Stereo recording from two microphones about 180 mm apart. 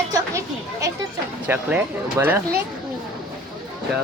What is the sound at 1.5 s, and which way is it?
Speech, 10° right (ahead or behind).